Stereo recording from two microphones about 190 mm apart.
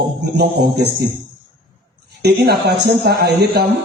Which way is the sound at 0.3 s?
60° right (ahead or behind).